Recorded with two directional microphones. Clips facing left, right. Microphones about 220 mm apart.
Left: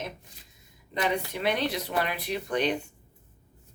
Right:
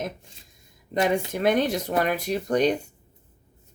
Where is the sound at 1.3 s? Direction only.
45° right (ahead or behind).